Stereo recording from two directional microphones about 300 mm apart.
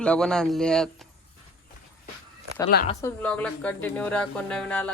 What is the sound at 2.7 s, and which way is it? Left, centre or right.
Speech, left.